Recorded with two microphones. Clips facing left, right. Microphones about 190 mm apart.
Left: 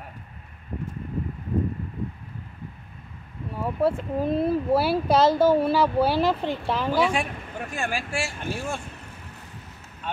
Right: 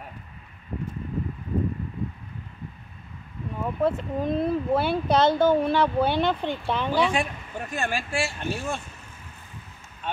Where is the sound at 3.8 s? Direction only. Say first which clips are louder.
Left 1 dB; 10° left (ahead or behind).